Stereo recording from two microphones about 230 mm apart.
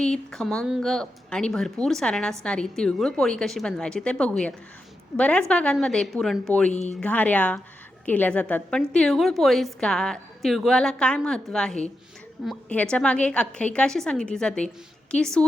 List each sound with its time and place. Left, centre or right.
0.0 s speech: centre
6.7 s speech: left
6.9 s speech: centre